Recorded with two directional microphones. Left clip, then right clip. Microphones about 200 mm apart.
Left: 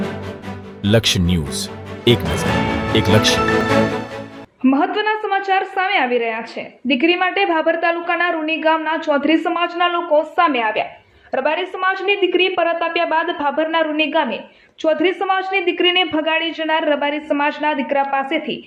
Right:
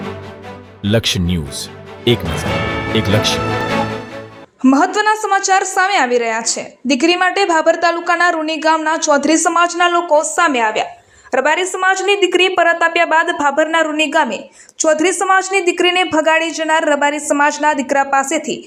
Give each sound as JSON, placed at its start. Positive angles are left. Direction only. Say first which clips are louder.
{"t": 0.8, "sound": "speech", "louder": "even", "side_deg": 0}
{"t": 4.6, "sound": "a woman's voice", "louder": "right 4 dB", "side_deg": -20}